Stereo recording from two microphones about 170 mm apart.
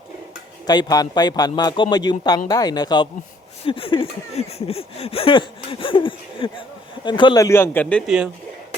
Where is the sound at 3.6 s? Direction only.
30° left (ahead or behind).